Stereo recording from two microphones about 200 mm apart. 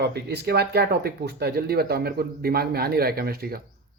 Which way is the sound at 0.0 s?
55° right (ahead or behind).